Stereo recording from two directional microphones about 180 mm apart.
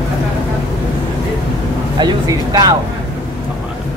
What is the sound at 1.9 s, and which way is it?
Vehicle, 25° right (ahead or behind).